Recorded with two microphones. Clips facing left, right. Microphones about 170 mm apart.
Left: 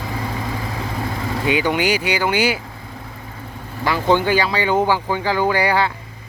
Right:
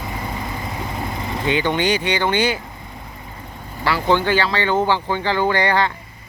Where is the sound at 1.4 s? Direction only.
10° left (ahead or behind).